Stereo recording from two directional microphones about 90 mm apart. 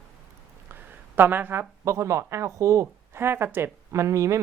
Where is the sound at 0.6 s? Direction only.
20° right (ahead or behind).